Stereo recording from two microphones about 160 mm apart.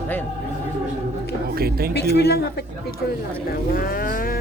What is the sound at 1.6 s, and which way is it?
Speech, 70° right (ahead or behind).